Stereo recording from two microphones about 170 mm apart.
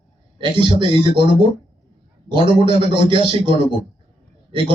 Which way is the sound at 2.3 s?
30° right (ahead or behind).